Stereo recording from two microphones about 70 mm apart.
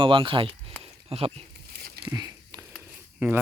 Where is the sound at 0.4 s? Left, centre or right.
Right.